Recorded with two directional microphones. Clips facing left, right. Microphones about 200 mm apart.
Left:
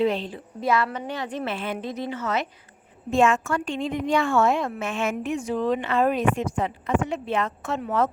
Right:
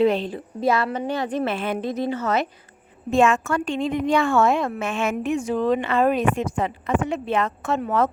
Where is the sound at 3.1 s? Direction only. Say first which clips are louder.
Right 2 dB; 65° right (ahead or behind).